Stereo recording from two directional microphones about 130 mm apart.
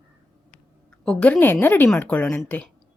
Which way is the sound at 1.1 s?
5° left (ahead or behind).